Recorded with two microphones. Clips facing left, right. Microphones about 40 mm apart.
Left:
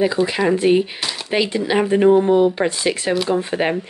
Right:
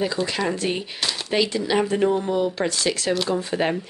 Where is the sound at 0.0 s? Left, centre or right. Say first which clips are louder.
Left 6 dB; centre.